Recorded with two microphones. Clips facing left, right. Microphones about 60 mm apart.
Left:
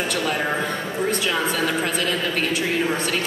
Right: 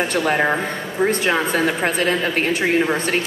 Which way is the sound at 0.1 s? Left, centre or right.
Right.